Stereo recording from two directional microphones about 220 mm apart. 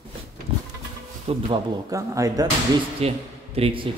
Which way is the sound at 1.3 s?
20° right (ahead or behind).